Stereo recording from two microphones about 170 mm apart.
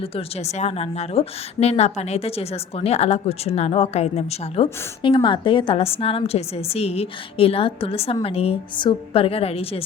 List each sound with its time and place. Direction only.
0.0 s a woman's voice: 35° left (ahead or behind)